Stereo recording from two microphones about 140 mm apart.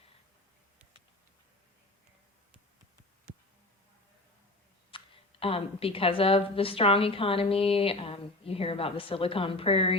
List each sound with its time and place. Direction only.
4.9 s speech: 40° left (ahead or behind)